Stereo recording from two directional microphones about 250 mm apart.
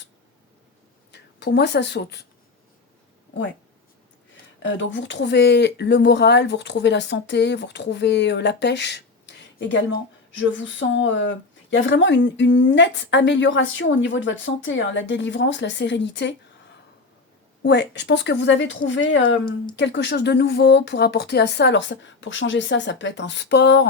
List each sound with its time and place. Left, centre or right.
1.1 s speech: left
4.6 s speech: left
17.6 s speech: left